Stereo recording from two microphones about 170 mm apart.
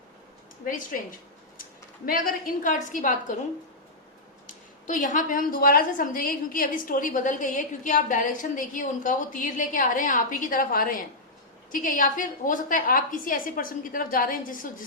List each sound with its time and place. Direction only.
0.6 s a woman's voice: 50° left (ahead or behind)
2.0 s a woman's voice: 55° left (ahead or behind)
4.9 s a woman's voice: 50° left (ahead or behind)